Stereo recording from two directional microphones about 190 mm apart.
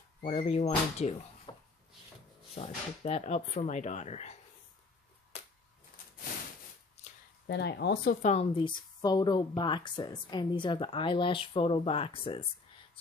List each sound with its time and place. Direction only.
0.2 s a woman's voice: 35° left (ahead or behind)
2.5 s a woman's voice: 30° left (ahead or behind)
7.4 s a woman's voice: 60° left (ahead or behind); by 12.4 s 30° left (ahead or behind)